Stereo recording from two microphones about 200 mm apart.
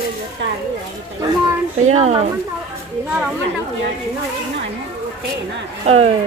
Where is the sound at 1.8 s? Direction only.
35° right (ahead or behind).